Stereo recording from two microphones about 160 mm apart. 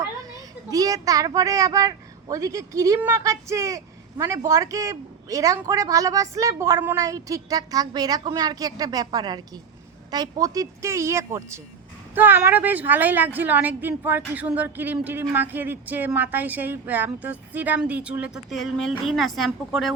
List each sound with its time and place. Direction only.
0.7 s a woman's voice: 20° right (ahead or behind); by 19.9 s centre (ahead or behind)